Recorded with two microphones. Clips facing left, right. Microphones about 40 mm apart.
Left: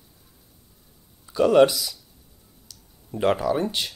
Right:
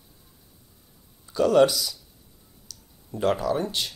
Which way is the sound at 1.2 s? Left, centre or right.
Centre.